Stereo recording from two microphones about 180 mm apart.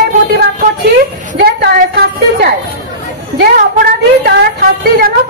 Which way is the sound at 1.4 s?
60° right (ahead or behind).